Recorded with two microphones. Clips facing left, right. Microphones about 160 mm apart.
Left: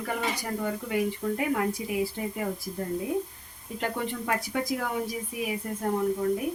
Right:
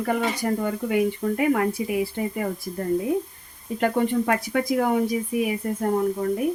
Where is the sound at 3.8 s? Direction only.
60° right (ahead or behind).